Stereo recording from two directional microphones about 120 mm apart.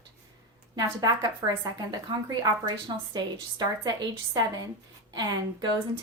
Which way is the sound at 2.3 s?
35° right (ahead or behind).